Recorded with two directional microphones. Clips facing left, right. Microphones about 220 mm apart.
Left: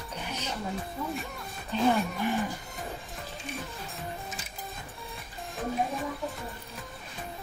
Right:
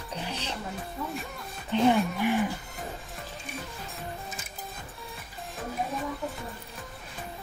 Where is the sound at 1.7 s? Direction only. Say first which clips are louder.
Right 3 dB; 20° right (ahead or behind).